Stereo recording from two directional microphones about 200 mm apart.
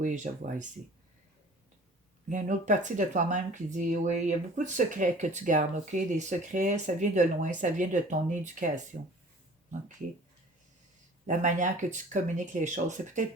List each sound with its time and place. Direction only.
0.0 s speech: 40° right (ahead or behind)
2.3 s speech: 40° right (ahead or behind)
11.3 s speech: 40° right (ahead or behind)